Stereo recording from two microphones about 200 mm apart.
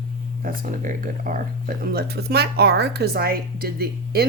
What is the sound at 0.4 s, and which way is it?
Speech, 40° right (ahead or behind).